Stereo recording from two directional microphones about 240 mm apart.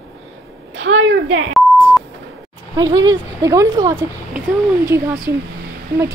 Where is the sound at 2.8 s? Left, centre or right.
Centre.